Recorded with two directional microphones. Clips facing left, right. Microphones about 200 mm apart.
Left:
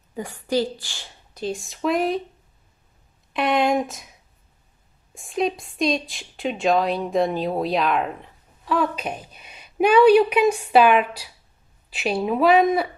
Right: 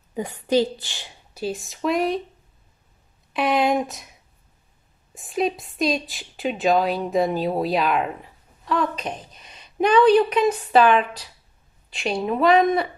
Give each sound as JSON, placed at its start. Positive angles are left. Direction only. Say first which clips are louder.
{"t": 0.1, "sound": "a woman's voice", "louder": "right 3 dB", "side_deg": -20}
{"t": 1.3, "sound": "speech", "louder": "even", "side_deg": -5}
{"t": 3.3, "sound": "speech", "louder": "even", "side_deg": 0}
{"t": 5.1, "sound": "speech", "louder": "even", "side_deg": 0}